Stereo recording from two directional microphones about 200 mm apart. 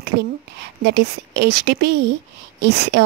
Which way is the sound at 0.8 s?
55° right (ahead or behind).